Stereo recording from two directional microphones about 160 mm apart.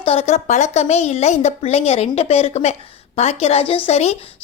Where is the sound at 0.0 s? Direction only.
35° left (ahead or behind).